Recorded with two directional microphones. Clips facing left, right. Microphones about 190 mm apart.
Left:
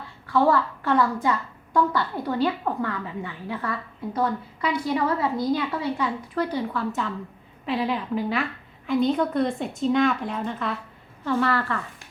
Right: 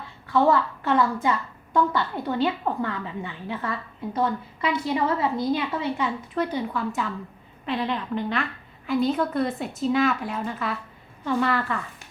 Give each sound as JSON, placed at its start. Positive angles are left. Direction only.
{"t": 0.3, "sound": "a woman's voice", "side_deg": -20}
{"t": 7.6, "sound": "a woman's voice", "side_deg": 5}
{"t": 11.3, "sound": "a woman's voice", "side_deg": -15}